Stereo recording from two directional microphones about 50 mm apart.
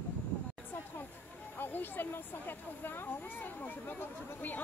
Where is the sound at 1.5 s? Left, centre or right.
Left.